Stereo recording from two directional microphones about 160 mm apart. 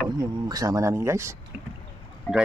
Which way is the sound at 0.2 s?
25° right (ahead or behind).